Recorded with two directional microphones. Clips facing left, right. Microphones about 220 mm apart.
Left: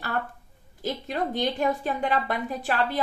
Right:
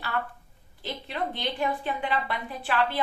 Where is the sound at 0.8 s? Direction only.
45° left (ahead or behind).